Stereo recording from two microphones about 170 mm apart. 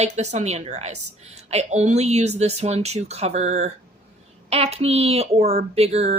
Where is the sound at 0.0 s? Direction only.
40° right (ahead or behind).